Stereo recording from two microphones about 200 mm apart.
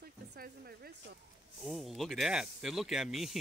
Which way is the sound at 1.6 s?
Centre (ahead or behind).